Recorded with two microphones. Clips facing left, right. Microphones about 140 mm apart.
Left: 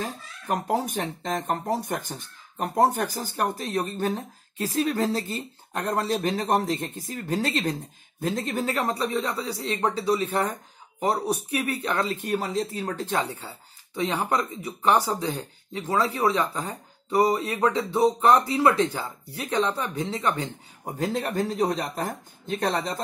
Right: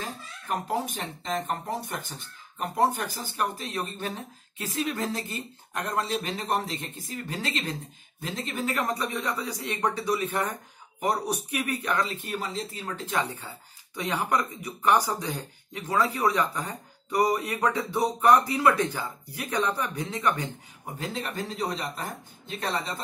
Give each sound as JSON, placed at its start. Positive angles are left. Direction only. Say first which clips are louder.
{"t": 0.5, "sound": "speech", "louder": "left 3 dB", "side_deg": 45}
{"t": 11.5, "sound": "speech", "louder": "even", "side_deg": 25}
{"t": 12.2, "sound": "speech", "louder": "left 6 dB", "side_deg": 45}
{"t": 13.9, "sound": "speech", "louder": "left 2 dB", "side_deg": 25}
{"t": 20.8, "sound": "speech", "louder": "left 6 dB", "side_deg": 45}